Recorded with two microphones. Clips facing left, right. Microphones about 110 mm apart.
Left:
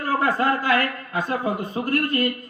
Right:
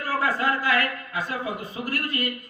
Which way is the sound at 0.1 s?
25° left (ahead or behind).